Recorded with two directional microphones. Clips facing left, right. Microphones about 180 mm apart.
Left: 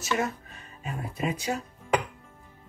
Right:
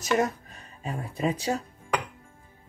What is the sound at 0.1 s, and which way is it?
Speech, 40° right (ahead or behind).